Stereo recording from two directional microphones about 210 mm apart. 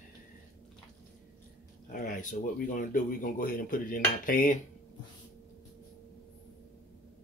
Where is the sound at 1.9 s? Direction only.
40° left (ahead or behind).